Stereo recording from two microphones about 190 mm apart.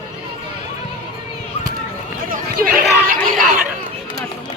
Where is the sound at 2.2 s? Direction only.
45° right (ahead or behind).